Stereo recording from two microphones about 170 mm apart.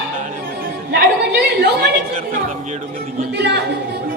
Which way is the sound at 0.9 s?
70° right (ahead or behind).